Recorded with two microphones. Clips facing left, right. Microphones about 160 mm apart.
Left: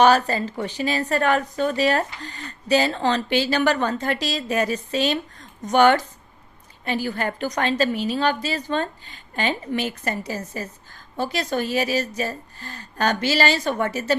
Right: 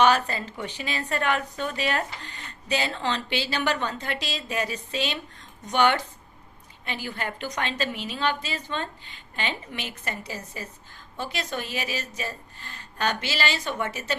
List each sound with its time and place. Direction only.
0.0 s a woman's voice: 40° left (ahead or behind)